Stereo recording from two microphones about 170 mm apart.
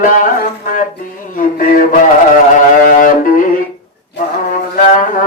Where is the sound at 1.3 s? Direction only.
50° left (ahead or behind).